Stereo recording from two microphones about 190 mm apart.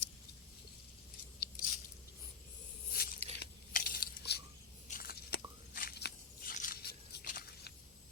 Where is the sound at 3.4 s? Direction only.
50° left (ahead or behind).